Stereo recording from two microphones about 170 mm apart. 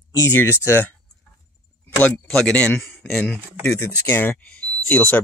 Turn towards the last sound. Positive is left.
turn(degrees=10)  # may be behind; listen again after turning